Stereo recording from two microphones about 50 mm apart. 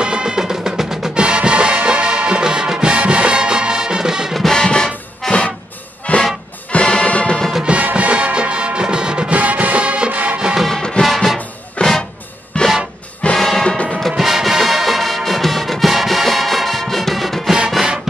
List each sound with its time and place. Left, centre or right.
0.0 s music: centre
1.2 s music: right
4.4 s music: centre
6.1 s music: left
7.6 s music: right
9.4 s music: right
10.8 s music: centre
11.1 s music: centre
11.8 s music: left
13.4 s music: centre